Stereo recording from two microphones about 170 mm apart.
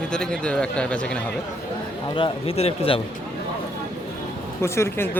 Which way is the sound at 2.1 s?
35° left (ahead or behind).